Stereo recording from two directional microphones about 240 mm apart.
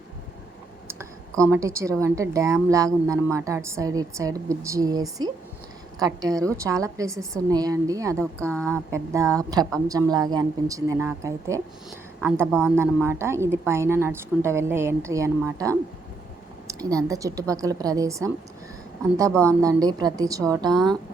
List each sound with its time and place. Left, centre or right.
0.9 s speech: centre
19.6 s speech: centre